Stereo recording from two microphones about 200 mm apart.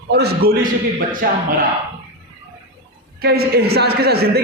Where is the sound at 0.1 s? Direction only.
55° right (ahead or behind).